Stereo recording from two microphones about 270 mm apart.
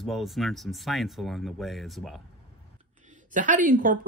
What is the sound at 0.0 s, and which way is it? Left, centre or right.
Speech, centre.